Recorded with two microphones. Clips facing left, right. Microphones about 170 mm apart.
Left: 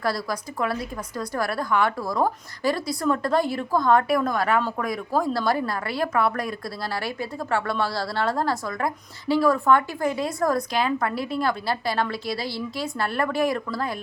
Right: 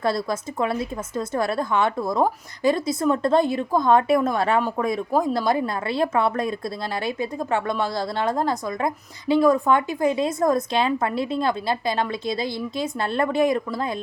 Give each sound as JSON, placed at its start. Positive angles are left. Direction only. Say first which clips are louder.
{"t": 0.0, "sound": "speech", "louder": "right 3 dB", "side_deg": -25}